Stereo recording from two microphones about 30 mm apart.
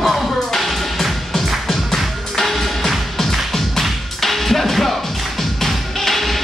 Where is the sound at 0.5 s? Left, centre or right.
Centre.